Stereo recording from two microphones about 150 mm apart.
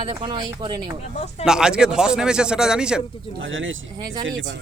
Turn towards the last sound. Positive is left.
turn(degrees=-25)  # may be behind; listen again after turning